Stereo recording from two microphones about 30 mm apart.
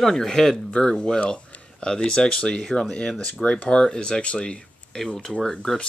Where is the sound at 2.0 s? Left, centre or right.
Left.